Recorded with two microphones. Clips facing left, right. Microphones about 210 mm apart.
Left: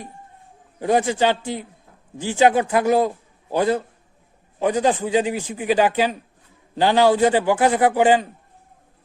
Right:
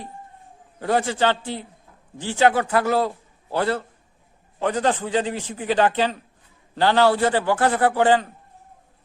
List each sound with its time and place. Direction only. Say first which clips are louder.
0.8 s a man's voice: left 3 dB; 15° left (ahead or behind)